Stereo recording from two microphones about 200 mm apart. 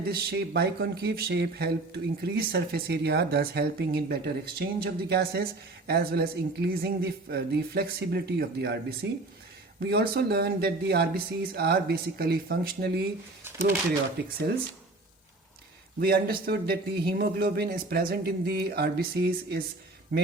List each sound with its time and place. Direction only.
0.0 s speech: 50° right (ahead or behind)
14.2 s speech: 55° right (ahead or behind)
16.0 s speech: 50° right (ahead or behind)